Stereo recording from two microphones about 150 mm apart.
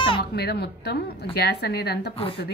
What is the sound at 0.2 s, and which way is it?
A woman's voice, 90° left.